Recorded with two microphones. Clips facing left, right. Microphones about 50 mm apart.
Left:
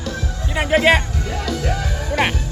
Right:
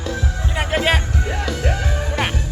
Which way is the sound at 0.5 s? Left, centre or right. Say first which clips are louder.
Left 5 dB; centre.